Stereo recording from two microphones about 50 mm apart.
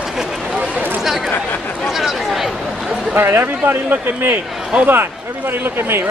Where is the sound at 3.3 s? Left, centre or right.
Right.